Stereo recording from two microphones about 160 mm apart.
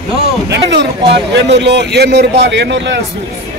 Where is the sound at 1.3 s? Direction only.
90° right.